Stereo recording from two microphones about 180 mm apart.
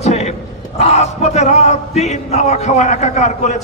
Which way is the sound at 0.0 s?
40° left (ahead or behind).